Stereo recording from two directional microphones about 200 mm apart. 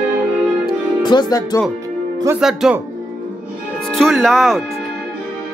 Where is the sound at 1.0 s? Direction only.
20° left (ahead or behind).